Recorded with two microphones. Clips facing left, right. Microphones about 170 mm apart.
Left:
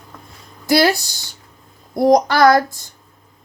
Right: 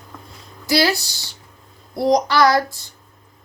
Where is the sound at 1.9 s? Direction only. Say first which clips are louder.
Left 3 dB; 45° left (ahead or behind).